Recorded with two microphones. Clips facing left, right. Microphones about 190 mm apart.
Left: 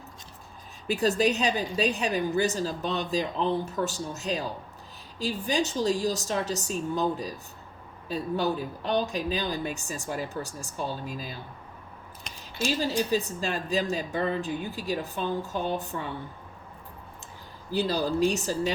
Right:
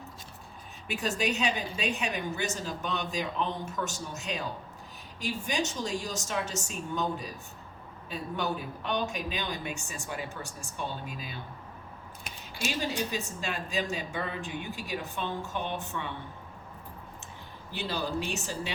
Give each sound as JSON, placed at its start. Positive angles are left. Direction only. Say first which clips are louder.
{"t": 0.9, "sound": "a woman's voice", "louder": "left 7 dB", "side_deg": 35}
{"t": 12.8, "sound": "a woman's voice", "louder": "left 7 dB", "side_deg": 35}
{"t": 17.7, "sound": "a woman's voice", "louder": "left 7 dB", "side_deg": 40}